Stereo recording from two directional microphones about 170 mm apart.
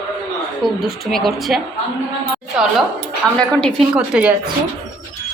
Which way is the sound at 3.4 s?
5° left (ahead or behind).